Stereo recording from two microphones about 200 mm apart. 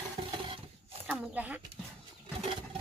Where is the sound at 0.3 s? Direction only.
25° right (ahead or behind).